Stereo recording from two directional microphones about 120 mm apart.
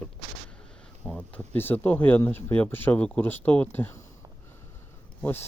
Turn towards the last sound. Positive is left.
turn(degrees=15)  # may be behind; listen again after turning